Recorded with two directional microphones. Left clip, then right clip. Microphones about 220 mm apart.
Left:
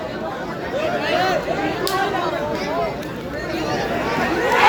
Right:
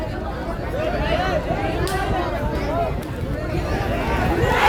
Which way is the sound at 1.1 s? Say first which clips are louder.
Left 5 dB; 50° left (ahead or behind).